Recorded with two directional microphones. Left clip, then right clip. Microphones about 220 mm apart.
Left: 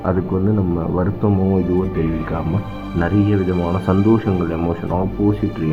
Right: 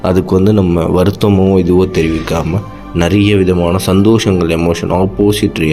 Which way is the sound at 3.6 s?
25° right (ahead or behind).